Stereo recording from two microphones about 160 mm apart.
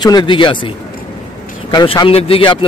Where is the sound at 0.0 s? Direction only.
25° left (ahead or behind).